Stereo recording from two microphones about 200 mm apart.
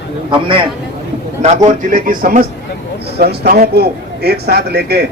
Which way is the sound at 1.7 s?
40° right (ahead or behind).